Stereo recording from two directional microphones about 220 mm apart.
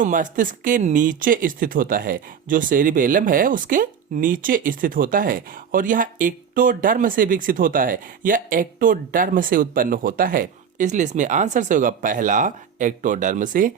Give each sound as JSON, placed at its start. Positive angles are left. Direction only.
{"t": 0.0, "sound": "speech", "side_deg": -35}